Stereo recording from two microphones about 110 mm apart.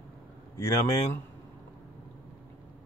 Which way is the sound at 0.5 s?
25° left (ahead or behind).